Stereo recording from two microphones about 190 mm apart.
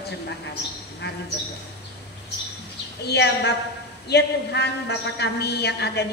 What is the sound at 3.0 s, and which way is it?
A man's voice, 60° left (ahead or behind).